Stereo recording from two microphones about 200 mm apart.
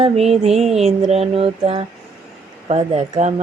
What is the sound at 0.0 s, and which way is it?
Speech, 30° right (ahead or behind).